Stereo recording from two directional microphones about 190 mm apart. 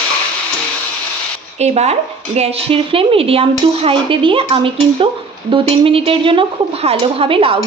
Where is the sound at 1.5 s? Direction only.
35° right (ahead or behind).